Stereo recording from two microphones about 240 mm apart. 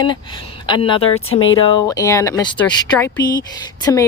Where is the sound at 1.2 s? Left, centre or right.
Left.